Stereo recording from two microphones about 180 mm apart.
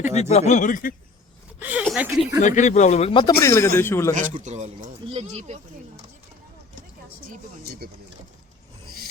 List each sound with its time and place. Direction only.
0.1 s speech: 40° left (ahead or behind)
1.5 s a woman's voice: 10° right (ahead or behind)
2.4 s speech: 45° left (ahead or behind)
3.4 s a man's voice: 15° left (ahead or behind)
4.1 s speech: 45° right (ahead or behind)
7.3 s a woman's voice: 60° right (ahead or behind)